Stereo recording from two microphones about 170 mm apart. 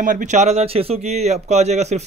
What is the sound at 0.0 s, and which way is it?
A man's voice, 50° right (ahead or behind).